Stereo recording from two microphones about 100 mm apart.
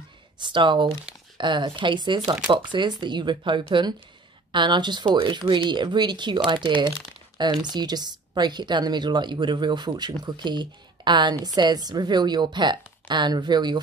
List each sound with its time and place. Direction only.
0.4 s a woman's voice: 55° right (ahead or behind)